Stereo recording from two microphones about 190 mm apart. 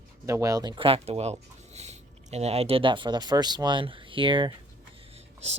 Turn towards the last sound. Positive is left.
turn(degrees=-35)  # may be behind; listen again after turning